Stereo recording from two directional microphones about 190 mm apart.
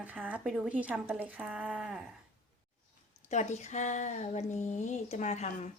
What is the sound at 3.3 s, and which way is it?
Speech, 35° left (ahead or behind).